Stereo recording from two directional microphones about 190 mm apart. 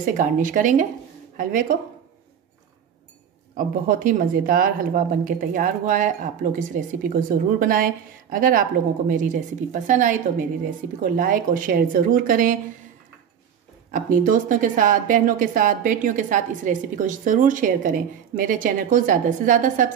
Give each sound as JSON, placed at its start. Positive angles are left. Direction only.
{"t": 0.0, "sound": "a woman's voice", "side_deg": -45}
{"t": 3.5, "sound": "a woman's voice", "side_deg": -45}
{"t": 13.9, "sound": "a woman's voice", "side_deg": -45}